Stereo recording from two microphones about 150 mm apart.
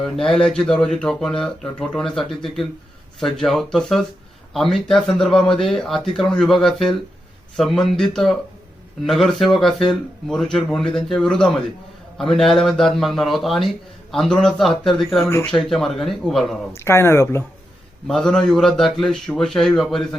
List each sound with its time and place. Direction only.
0.2 s a man's voice: 5° left (ahead or behind)
15.3 s speech: 15° left (ahead or behind)
15.5 s a man's voice: centre (ahead or behind)
16.7 s speech: 15° left (ahead or behind)
18.1 s a man's voice: 5° left (ahead or behind)